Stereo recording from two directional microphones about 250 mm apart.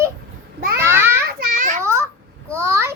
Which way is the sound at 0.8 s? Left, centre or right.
Centre.